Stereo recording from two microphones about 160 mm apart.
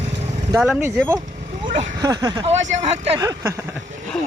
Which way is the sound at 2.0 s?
25° right (ahead or behind).